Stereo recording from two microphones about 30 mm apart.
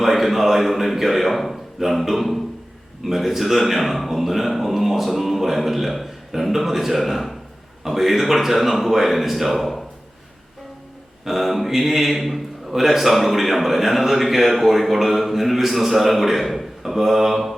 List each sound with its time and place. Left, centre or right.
0.0 s a man's voice: centre
11.3 s a man's voice: centre